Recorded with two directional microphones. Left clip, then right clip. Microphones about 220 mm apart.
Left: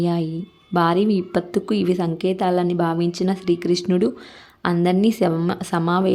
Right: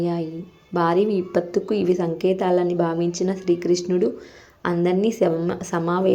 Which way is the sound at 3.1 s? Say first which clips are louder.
Even; 45° left (ahead or behind).